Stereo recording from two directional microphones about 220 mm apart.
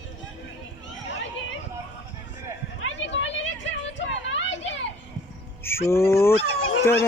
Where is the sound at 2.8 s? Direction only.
55° left (ahead or behind).